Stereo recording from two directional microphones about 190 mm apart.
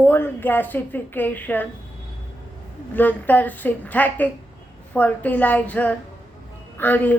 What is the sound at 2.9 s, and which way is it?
A woman's voice, 10° left (ahead or behind).